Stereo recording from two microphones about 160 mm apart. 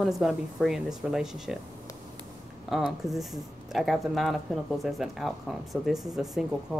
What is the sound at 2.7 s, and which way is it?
Speech, centre (ahead or behind).